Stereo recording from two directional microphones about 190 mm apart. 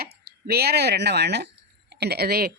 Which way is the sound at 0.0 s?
55° right (ahead or behind).